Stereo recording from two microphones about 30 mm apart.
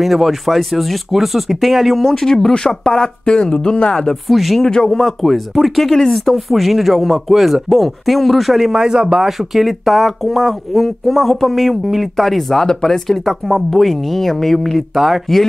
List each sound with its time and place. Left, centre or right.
0.0 s speech: centre
2.2 s speech: left
3.9 s speech: left
4.3 s speech: centre
4.6 s speech: left
4.9 s speech: centre
8.5 s a man's voice: centre
8.8 s a man's voice: right
9.4 s speech: centre
12.6 s speech: centre
13.2 s speech: centre